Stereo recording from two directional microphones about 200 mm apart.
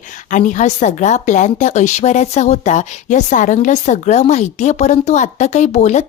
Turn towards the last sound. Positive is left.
turn(degrees=35)  # may be behind; listen again after turning